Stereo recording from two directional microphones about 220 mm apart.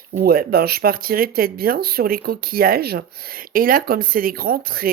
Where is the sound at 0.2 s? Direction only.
45° right (ahead or behind).